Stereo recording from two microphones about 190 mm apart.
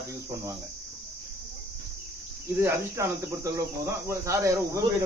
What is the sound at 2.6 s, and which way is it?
Cricket, 15° right (ahead or behind).